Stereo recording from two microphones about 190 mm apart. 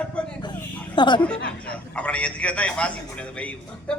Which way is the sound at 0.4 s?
25° left (ahead or behind).